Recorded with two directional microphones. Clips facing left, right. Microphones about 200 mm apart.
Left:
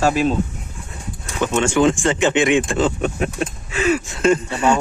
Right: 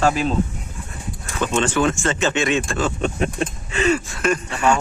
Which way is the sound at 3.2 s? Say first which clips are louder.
Even; 5° left (ahead or behind).